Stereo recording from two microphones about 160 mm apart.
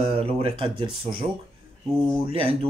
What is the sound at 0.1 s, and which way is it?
Speech, 35° right (ahead or behind).